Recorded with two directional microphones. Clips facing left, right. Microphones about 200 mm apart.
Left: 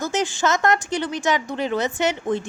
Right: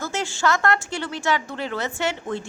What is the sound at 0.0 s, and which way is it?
Speech, 15° left (ahead or behind).